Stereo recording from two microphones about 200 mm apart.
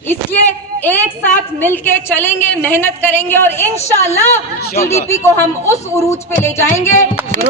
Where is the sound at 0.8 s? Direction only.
10° left (ahead or behind).